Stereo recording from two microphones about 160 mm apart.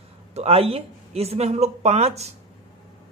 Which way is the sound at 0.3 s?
40° right (ahead or behind).